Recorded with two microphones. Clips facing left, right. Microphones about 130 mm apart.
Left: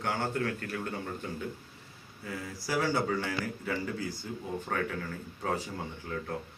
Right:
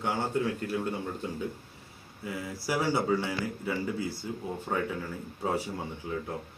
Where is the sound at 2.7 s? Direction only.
15° right (ahead or behind).